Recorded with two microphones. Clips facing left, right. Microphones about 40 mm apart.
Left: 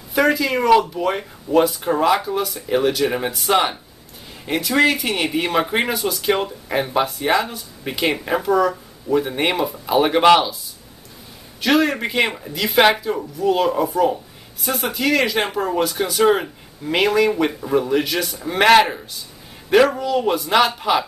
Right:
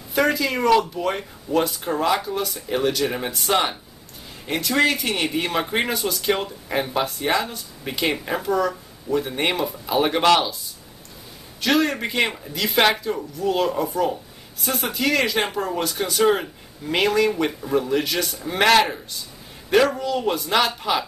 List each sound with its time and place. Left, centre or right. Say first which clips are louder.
0.1 s speech: left 3 dB; centre
11.6 s speech: left 3 dB; centre